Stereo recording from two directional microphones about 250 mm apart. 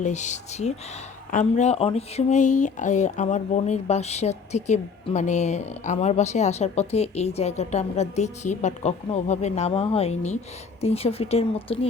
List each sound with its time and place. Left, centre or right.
0.0 s speech: left